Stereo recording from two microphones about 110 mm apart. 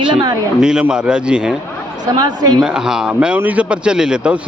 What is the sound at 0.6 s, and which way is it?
Speech, 5° right (ahead or behind).